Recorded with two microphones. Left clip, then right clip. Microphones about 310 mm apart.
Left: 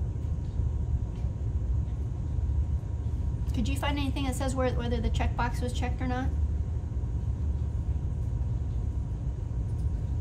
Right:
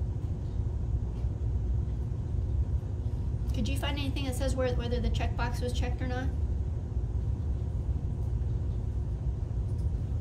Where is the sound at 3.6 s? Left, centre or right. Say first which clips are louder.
Left 3 dB; centre.